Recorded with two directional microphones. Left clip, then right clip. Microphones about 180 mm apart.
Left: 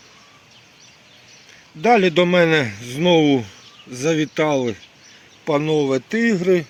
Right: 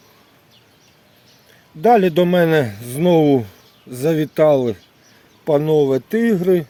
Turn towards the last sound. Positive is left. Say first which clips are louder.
# right 1 dB
turn(degrees=-50)  # may be behind; listen again after turning